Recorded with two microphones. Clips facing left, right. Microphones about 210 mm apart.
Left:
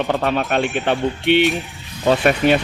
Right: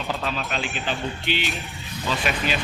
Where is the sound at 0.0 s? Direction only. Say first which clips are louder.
Left 9 dB; 65° left (ahead or behind).